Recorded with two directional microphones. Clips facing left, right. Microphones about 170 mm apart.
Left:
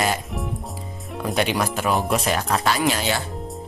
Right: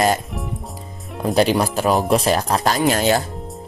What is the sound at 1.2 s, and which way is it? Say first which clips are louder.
Speech: right 6 dB; 35° right (ahead or behind).